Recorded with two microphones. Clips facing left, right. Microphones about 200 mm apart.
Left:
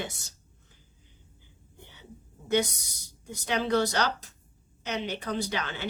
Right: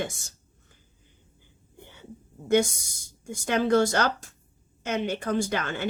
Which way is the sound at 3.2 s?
50° right (ahead or behind).